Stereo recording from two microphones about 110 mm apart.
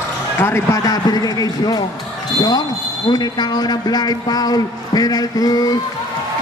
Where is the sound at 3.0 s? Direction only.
40° left (ahead or behind).